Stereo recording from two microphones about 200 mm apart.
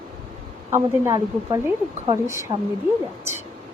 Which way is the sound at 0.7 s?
15° right (ahead or behind).